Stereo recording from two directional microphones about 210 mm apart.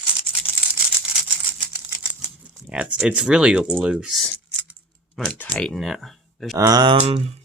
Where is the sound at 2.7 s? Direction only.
5° right (ahead or behind).